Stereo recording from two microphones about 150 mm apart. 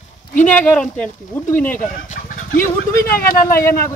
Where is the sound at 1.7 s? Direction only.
65° left (ahead or behind).